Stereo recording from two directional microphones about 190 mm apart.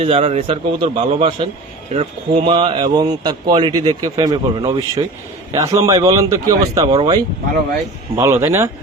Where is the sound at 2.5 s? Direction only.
30° right (ahead or behind).